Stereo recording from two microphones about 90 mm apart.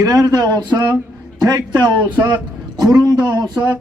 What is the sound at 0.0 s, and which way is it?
A man's voice, 45° right (ahead or behind).